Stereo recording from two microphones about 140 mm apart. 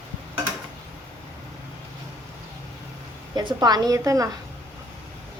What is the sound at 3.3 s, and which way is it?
Speech, 30° right (ahead or behind).